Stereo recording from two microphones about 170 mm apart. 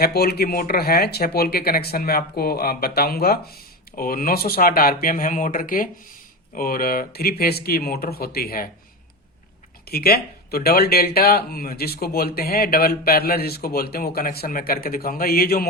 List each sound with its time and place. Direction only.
0.0 s speech: 65° left (ahead or behind)
9.8 s speech: 65° left (ahead or behind)